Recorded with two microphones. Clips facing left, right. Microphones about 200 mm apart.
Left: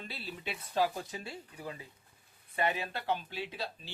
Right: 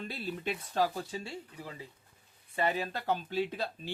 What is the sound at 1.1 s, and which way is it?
Speech, 25° right (ahead or behind).